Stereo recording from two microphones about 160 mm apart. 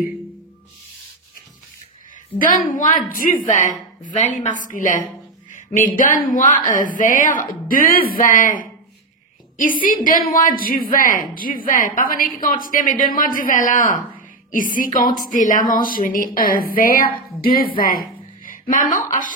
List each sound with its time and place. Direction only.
2.3 s a woman's voice: 60° left (ahead or behind)